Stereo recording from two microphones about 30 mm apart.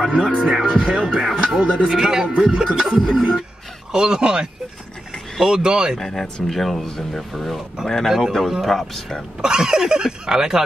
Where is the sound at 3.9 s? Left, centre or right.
Right.